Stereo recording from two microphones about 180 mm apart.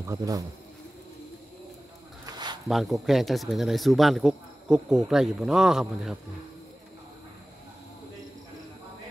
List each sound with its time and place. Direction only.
0.0 s speech: 20° right (ahead or behind)
2.2 s a sound: 25° right (ahead or behind)
2.7 s speech: centre (ahead or behind)